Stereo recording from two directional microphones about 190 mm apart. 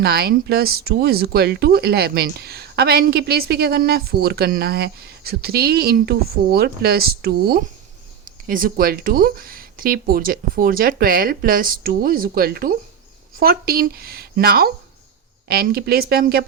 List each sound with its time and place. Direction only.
0.0 s speech: 55° right (ahead or behind)